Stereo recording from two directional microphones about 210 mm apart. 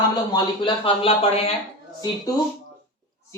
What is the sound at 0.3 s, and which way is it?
Speech, 25° left (ahead or behind).